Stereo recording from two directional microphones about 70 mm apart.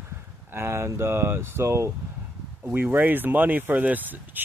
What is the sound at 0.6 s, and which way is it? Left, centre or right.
Speech, right.